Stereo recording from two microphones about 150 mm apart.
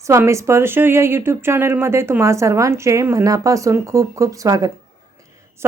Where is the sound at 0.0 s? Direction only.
20° right (ahead or behind).